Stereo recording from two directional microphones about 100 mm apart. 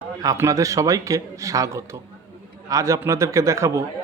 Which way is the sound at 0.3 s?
35° right (ahead or behind).